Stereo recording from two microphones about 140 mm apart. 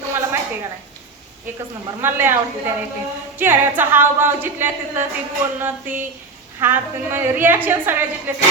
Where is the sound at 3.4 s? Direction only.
15° right (ahead or behind).